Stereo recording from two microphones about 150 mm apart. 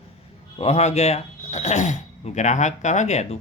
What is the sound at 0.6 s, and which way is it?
Speech, 45° left (ahead or behind).